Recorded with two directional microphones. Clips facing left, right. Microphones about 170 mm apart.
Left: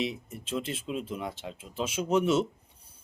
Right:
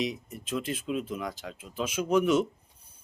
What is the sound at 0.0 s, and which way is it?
Speech, 30° left (ahead or behind).